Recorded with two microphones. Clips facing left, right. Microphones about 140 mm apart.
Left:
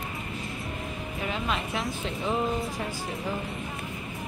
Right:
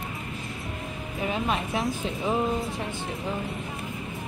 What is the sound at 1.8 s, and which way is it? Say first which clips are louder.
Speech: right 3 dB; centre (ahead or behind).